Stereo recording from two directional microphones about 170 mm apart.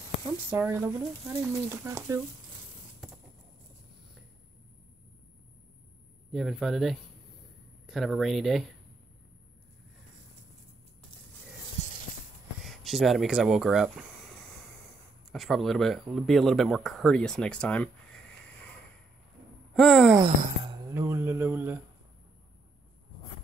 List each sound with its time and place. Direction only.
0.5 s speech: 10° right (ahead or behind)
3.0 s a sound: centre (ahead or behind)
6.3 s speech: centre (ahead or behind)
12.6 s speech: centre (ahead or behind)
15.3 s speech: centre (ahead or behind)
19.7 s speech: centre (ahead or behind)
20.9 s a sound: 15° right (ahead or behind)